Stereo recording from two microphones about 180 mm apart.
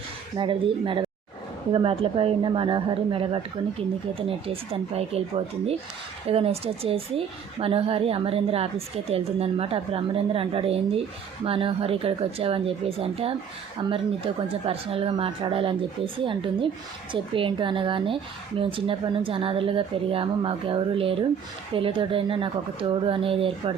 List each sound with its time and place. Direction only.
0.3 s speech: 25° right (ahead or behind)